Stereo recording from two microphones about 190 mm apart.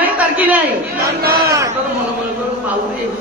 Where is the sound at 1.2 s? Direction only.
55° right (ahead or behind).